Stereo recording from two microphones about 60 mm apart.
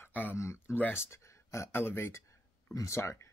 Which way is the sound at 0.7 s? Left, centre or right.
Left.